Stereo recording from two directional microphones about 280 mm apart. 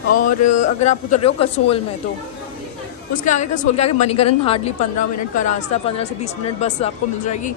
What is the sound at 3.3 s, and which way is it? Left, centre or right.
Speech, left.